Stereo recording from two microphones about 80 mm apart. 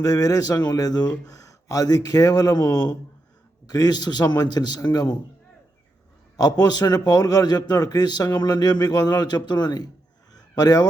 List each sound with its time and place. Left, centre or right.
0.0 s a man's voice: left
6.3 s a man's voice: left
10.3 s fowl: left